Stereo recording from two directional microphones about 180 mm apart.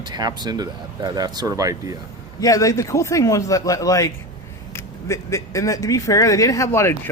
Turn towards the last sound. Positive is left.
turn(degrees=15)  # may be behind; listen again after turning